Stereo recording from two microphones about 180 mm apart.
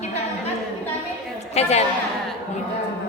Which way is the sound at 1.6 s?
35° left (ahead or behind).